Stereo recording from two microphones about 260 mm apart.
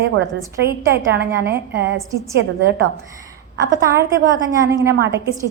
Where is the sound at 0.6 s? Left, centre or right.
Right.